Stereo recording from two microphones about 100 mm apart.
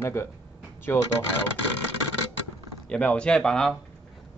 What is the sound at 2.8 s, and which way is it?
Speech, 10° left (ahead or behind).